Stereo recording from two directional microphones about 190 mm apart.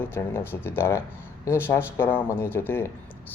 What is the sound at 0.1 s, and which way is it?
Speech, 15° left (ahead or behind).